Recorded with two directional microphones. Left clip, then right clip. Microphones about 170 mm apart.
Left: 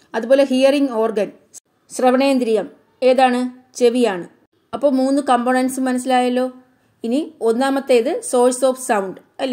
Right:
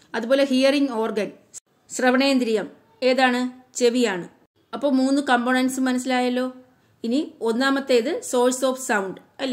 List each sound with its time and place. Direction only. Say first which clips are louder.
0.1 s speech: left 5 dB; 25° left (ahead or behind)